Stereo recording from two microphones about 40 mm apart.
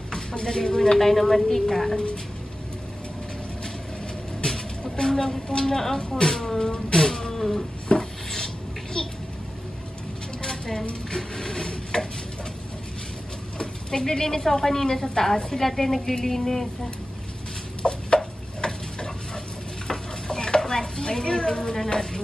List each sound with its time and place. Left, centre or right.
0.1 s a woman's voice: centre
0.9 s speech: centre
4.4 s a sound: centre
5.5 s speech: centre
6.6 s insect: centre
7.9 s rub: left
10.4 s dishes: centre
11.1 s rub: centre
13.6 s speech: centre
17.8 s a sound: left
19.9 s stir: centre